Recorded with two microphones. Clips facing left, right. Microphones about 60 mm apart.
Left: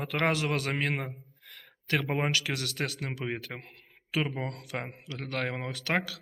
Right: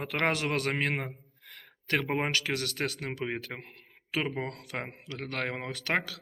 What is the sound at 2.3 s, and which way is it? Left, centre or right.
Speech, right.